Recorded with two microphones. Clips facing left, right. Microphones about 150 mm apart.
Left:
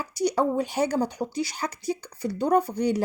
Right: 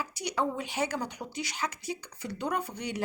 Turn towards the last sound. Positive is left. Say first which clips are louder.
# left 11 dB
turn(degrees=40)  # may be behind; listen again after turning